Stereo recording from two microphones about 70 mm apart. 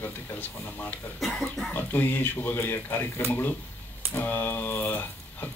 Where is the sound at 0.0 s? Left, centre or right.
Left.